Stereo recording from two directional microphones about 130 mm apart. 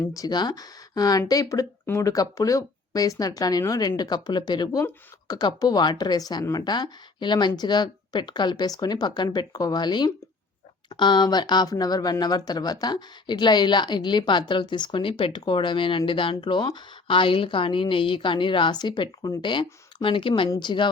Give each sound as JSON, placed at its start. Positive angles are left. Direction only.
{"t": 0.1, "sound": "a woman's voice", "side_deg": 30}